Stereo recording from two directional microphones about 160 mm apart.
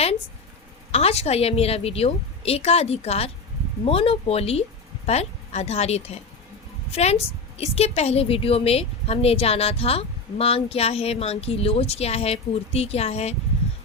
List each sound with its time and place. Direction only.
0.9 s a woman's voice: 40° left (ahead or behind)